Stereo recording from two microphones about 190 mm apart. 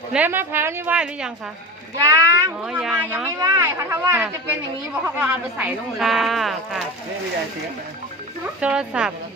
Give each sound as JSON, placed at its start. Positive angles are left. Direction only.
{"t": 0.1, "sound": "speech", "side_deg": -10}
{"t": 2.6, "sound": "speech", "side_deg": -5}
{"t": 8.6, "sound": "speech", "side_deg": -5}